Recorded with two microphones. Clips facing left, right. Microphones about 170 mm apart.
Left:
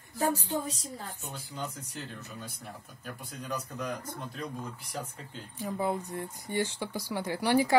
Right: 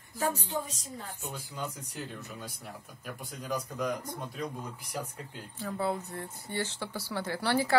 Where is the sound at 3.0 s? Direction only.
10° right (ahead or behind).